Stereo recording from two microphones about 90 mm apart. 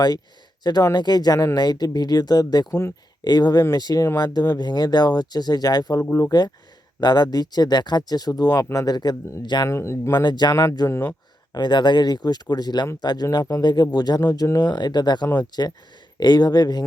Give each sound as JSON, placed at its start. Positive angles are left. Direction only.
{"t": 0.6, "sound": "speech", "side_deg": 50}
{"t": 6.0, "sound": "speech", "side_deg": 35}
{"t": 7.0, "sound": "speech", "side_deg": 50}
{"t": 9.6, "sound": "speech", "side_deg": 30}
{"t": 10.2, "sound": "speech", "side_deg": 50}
{"t": 10.5, "sound": "speech", "side_deg": 40}
{"t": 11.5, "sound": "speech", "side_deg": 55}
{"t": 14.7, "sound": "speech", "side_deg": 50}